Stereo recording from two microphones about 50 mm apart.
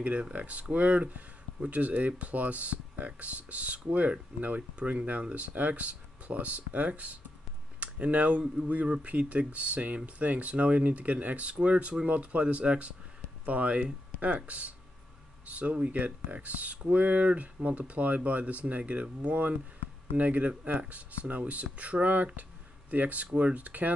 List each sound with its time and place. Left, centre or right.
0.0 s speech: right